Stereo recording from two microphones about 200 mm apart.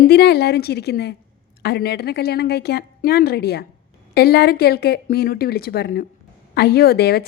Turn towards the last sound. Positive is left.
turn(degrees=50)  # may be behind; listen again after turning